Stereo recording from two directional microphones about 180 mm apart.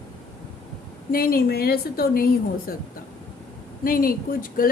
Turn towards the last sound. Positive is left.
turn(degrees=50)  # may be behind; listen again after turning